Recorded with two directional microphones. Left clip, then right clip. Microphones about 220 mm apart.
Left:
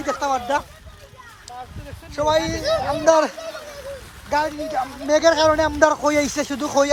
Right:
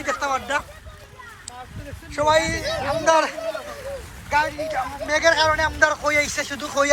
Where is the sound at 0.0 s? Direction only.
25° left (ahead or behind).